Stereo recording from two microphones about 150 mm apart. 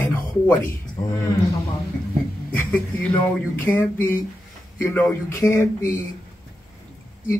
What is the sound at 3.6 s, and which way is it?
Speech, 15° left (ahead or behind).